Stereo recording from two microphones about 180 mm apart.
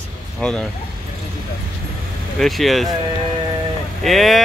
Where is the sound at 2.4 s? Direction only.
Centre (ahead or behind).